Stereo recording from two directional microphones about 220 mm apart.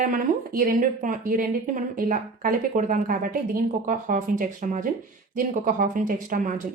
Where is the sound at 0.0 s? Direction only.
40° right (ahead or behind).